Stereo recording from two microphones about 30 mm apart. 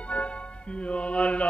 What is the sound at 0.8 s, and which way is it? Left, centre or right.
Mantra, left.